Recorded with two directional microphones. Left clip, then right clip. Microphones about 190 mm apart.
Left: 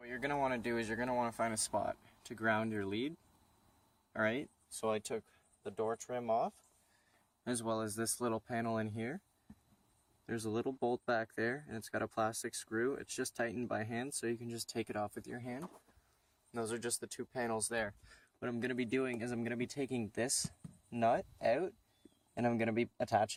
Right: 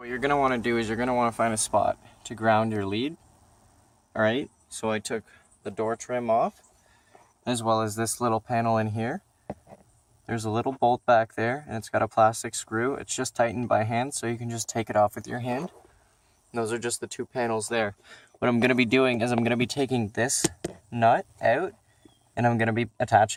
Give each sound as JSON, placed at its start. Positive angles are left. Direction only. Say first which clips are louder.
{"t": 0.0, "sound": "speech", "louder": "right 12 dB", "side_deg": 0}
{"t": 4.1, "sound": "speech", "louder": "right 11 dB", "side_deg": 15}
{"t": 10.2, "sound": "speech", "louder": "right 10 dB", "side_deg": 10}
{"t": 15.3, "sound": "speech", "louder": "right 15 dB", "side_deg": -10}
{"t": 16.5, "sound": "speech", "louder": "right 11 dB", "side_deg": 10}
{"t": 17.7, "sound": "speech", "louder": "right 12 dB", "side_deg": -5}
{"t": 18.5, "sound": "speech", "louder": "right 15 dB", "side_deg": -25}
{"t": 20.9, "sound": "speech", "louder": "right 12 dB", "side_deg": 20}